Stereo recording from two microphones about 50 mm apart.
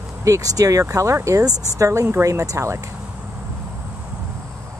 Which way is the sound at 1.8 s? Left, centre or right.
Right.